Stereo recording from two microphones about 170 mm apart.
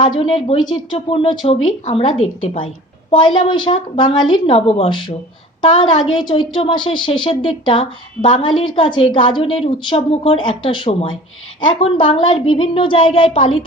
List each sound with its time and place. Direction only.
0.0 s a woman's voice: 30° left (ahead or behind)